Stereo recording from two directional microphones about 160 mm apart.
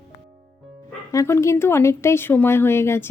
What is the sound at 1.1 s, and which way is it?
Speech, 20° left (ahead or behind).